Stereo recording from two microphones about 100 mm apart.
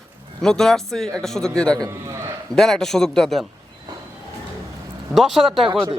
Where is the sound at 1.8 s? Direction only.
30° right (ahead or behind).